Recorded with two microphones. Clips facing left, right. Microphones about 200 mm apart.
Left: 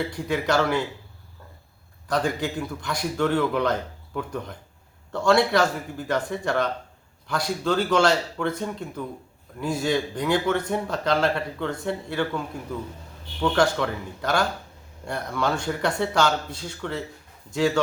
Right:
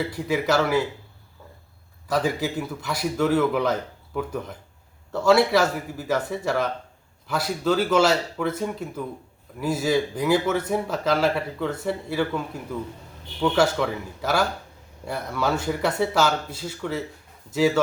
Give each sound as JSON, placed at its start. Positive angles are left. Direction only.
{"t": 0.1, "sound": "speech", "side_deg": -5}
{"t": 2.0, "sound": "speech", "side_deg": -5}
{"t": 13.4, "sound": "speech", "side_deg": -5}